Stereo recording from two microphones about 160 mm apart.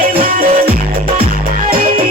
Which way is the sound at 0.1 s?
70° right (ahead or behind).